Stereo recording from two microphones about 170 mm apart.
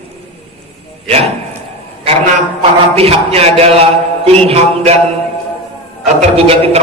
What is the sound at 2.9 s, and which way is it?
A man's voice, 35° right (ahead or behind).